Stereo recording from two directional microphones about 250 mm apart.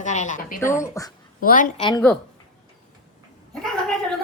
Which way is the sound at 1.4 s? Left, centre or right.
Left.